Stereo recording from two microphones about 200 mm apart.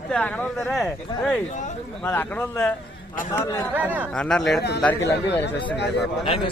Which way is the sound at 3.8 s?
10° right (ahead or behind).